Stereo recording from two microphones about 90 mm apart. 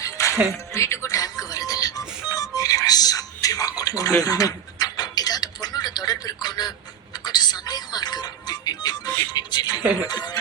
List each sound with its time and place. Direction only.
0.0 s music: 35° left (ahead or behind)
4.2 s a sound: 40° left (ahead or behind)
9.3 s music: 55° left (ahead or behind)
9.8 s speech: 15° right (ahead or behind)
10.1 s speech: 55° left (ahead or behind)